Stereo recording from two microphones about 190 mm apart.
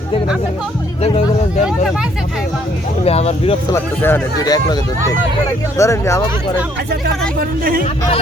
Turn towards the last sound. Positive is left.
turn(degrees=-50)  # may be behind; listen again after turning